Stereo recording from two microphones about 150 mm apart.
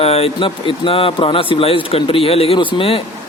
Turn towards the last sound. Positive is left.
turn(degrees=40)  # may be behind; listen again after turning